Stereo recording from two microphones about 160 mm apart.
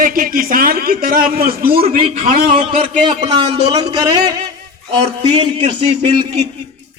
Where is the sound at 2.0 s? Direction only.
35° right (ahead or behind).